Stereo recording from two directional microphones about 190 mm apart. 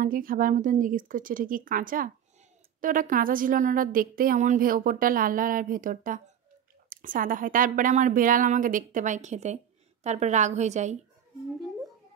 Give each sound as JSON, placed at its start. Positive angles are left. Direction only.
{"t": 0.0, "sound": "a woman's voice", "side_deg": -45}